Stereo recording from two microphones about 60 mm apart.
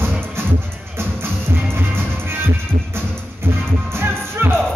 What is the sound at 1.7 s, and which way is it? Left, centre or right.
Music, right.